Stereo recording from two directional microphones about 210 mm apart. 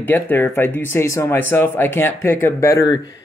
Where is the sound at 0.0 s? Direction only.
10° left (ahead or behind).